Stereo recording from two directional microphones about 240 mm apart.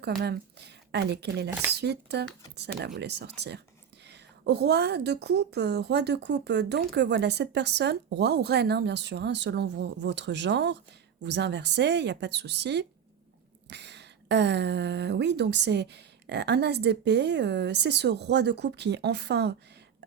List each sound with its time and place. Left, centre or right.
0.0 s a woman's voice: right